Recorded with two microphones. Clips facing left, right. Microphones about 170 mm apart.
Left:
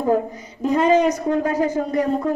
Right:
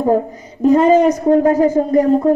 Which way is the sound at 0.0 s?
45° right (ahead or behind).